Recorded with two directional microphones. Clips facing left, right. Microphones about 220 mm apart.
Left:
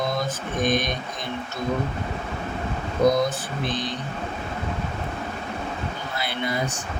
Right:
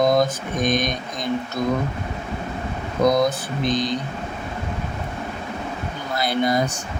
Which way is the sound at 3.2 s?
40° right (ahead or behind).